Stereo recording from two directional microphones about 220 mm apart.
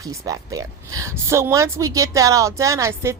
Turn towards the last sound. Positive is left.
turn(degrees=-15)  # may be behind; listen again after turning